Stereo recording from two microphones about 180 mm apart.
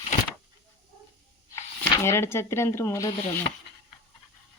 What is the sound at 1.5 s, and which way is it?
Speech, 15° left (ahead or behind).